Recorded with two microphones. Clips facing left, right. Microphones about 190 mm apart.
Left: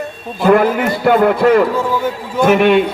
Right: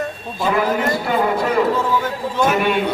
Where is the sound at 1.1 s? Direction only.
60° left (ahead or behind).